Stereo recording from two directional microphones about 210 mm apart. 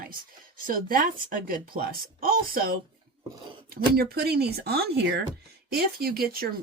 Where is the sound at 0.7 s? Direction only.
45° right (ahead or behind).